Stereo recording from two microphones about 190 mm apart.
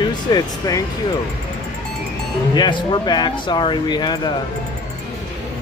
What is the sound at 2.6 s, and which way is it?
Speech, 25° left (ahead or behind).